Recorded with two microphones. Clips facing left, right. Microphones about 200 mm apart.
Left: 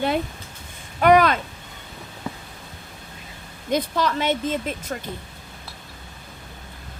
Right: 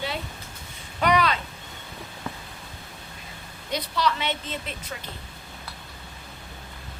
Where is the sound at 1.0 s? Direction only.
50° left (ahead or behind).